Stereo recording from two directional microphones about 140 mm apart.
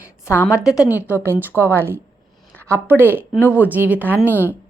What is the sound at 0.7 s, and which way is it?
Speech, 25° left (ahead or behind).